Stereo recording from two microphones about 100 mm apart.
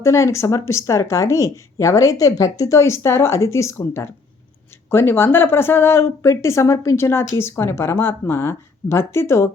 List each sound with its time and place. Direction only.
0.0 s speech: 30° left (ahead or behind)